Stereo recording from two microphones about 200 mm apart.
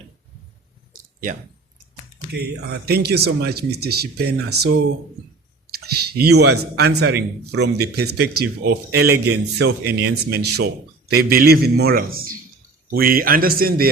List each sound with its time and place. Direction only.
2.3 s speech: 55° right (ahead or behind)